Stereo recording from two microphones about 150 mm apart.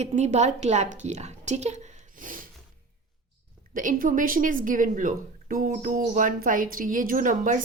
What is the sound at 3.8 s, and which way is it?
A woman's voice, 65° right (ahead or behind).